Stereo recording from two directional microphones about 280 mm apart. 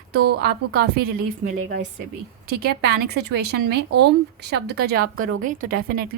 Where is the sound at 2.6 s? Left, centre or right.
Right.